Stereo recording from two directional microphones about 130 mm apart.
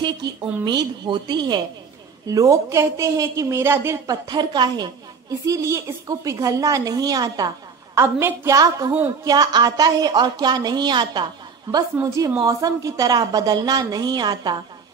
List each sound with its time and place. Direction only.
0.7 s a woman's voice: 35° right (ahead or behind)
5.5 s a woman's voice: 25° right (ahead or behind)